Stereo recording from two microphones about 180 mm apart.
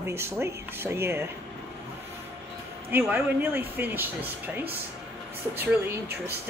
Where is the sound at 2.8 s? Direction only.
10° right (ahead or behind).